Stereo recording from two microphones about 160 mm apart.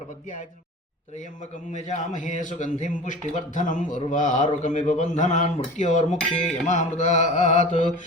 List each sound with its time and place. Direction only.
1.7 s a man's voice: 50° left (ahead or behind)